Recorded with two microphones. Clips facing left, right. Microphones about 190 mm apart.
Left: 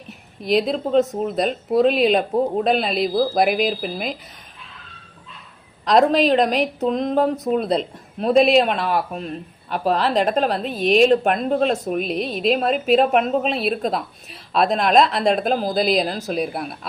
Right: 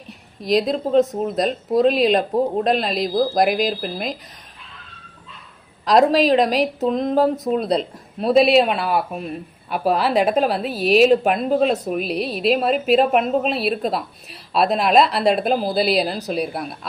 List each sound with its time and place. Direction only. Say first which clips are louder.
0.1 s speech: right 1 dB; centre (ahead or behind)
5.8 s speech: right 1 dB; centre (ahead or behind)